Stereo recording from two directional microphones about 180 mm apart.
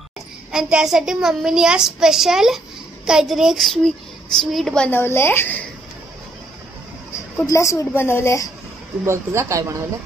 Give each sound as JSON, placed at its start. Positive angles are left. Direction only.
{"t": 0.5, "sound": "a child's voice", "side_deg": -5}
{"t": 7.4, "sound": "a woman's voice", "side_deg": 15}
{"t": 9.0, "sound": "speech", "side_deg": -15}